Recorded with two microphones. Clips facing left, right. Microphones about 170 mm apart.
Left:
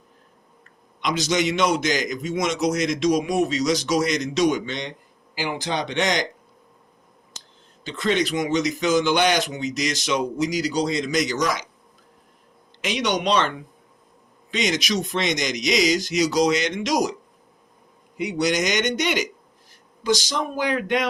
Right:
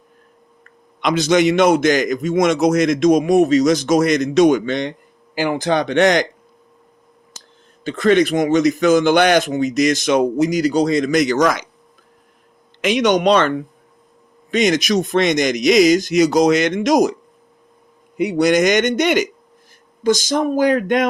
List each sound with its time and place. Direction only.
1.0 s a man's voice: 55° right (ahead or behind)
7.9 s speech: 50° right (ahead or behind)
12.8 s speech: 50° right (ahead or behind)
14.5 s speech: 50° right (ahead or behind)
18.2 s a man's voice: 55° right (ahead or behind)